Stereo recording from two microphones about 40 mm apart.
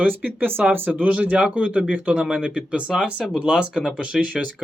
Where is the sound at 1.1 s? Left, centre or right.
Right.